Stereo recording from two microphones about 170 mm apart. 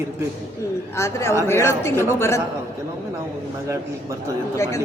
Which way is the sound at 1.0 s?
15° left (ahead or behind).